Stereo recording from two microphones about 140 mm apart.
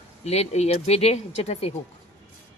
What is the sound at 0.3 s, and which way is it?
Speech, 50° left (ahead or behind).